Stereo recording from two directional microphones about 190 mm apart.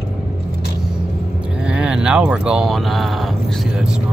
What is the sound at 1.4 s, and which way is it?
Speech, 5° right (ahead or behind).